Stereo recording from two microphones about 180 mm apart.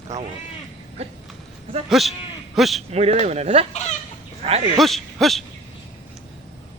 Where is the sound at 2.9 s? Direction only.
35° right (ahead or behind).